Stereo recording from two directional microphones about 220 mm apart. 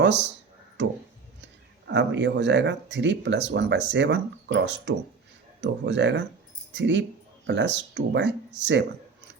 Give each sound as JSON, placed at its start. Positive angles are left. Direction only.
{"t": 0.0, "sound": "speech", "side_deg": -55}